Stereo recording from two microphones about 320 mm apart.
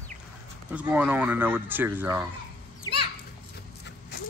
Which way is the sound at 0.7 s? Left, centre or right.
Centre.